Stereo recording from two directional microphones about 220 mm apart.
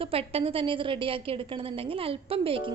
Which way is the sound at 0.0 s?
25° right (ahead or behind).